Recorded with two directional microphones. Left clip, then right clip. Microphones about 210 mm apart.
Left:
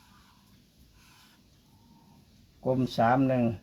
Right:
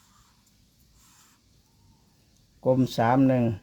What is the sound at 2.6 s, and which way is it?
Speech, 55° right (ahead or behind).